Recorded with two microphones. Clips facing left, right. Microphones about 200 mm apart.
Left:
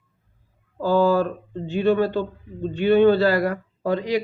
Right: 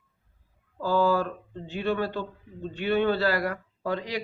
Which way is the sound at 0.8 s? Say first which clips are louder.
Left 5 dB; 25° left (ahead or behind).